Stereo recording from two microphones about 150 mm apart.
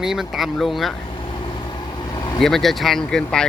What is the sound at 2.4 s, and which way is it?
Speech, centre (ahead or behind).